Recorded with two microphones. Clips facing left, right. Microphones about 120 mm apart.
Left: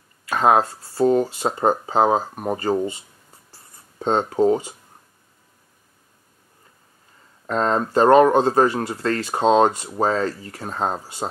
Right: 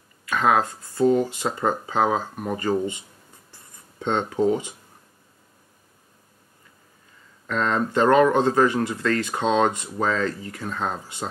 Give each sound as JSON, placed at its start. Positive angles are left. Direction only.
{"t": 0.2, "sound": "speech", "side_deg": 35}
{"t": 3.5, "sound": "writing", "side_deg": 35}
{"t": 7.4, "sound": "speech", "side_deg": 35}